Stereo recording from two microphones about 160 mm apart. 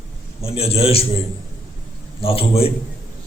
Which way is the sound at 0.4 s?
40° left (ahead or behind).